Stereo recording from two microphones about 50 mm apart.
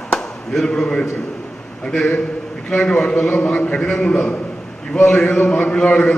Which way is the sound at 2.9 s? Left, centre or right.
Centre.